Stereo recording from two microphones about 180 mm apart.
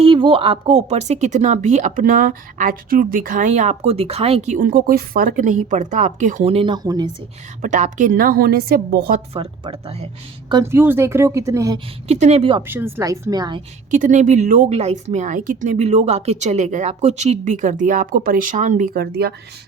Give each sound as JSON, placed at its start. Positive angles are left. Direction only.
{"t": 0.0, "sound": "speech", "side_deg": -30}
{"t": 7.6, "sound": "speech", "side_deg": -45}
{"t": 9.3, "sound": "speech", "side_deg": -30}
{"t": 10.5, "sound": "a woman's voice", "side_deg": -15}
{"t": 12.0, "sound": "speech", "side_deg": -35}
{"t": 12.6, "sound": "speech", "side_deg": -10}
{"t": 13.9, "sound": "speech", "side_deg": -45}